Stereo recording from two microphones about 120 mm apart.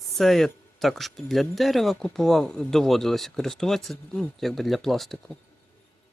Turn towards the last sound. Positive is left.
turn(degrees=0)  # may be behind; listen again after turning